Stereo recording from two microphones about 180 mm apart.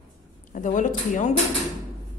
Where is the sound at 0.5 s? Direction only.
45° left (ahead or behind).